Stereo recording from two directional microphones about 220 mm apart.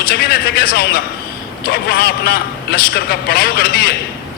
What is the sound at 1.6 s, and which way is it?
A man's voice, 45° left (ahead or behind).